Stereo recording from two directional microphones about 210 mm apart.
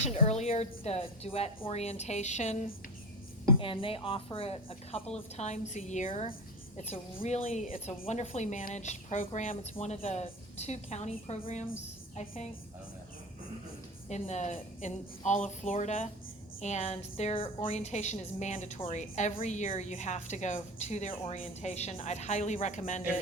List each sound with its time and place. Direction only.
0.0 s a woman's voice: 30° left (ahead or behind)
14.1 s a woman's voice: 35° left (ahead or behind)